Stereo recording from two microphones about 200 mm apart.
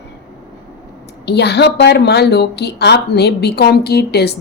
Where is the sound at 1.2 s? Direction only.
55° left (ahead or behind).